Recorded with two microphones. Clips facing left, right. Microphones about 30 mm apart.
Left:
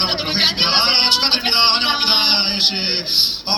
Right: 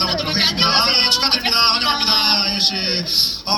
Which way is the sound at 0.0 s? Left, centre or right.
Left.